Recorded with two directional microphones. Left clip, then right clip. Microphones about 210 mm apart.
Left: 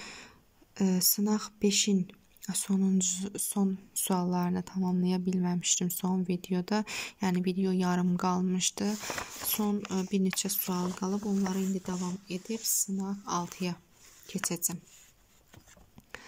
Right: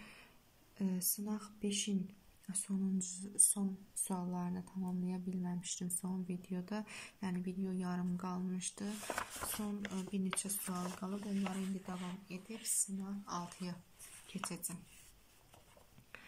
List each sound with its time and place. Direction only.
0.0 s a sound: 45° left (ahead or behind)
0.7 s speech: 45° left (ahead or behind)
6.3 s speech: 55° left (ahead or behind)
8.0 s speech: 40° left (ahead or behind)